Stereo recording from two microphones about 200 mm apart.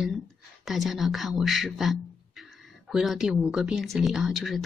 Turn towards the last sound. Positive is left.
turn(degrees=0)  # may be behind; listen again after turning